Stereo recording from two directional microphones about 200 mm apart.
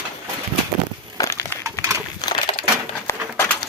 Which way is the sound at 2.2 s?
25° left (ahead or behind).